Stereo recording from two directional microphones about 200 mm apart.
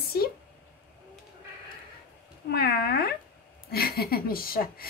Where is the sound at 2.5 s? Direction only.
50° left (ahead or behind).